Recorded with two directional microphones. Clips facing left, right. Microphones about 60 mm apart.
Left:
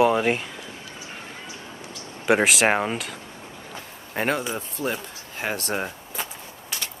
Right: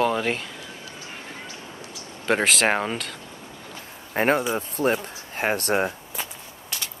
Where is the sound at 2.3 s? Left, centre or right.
Centre.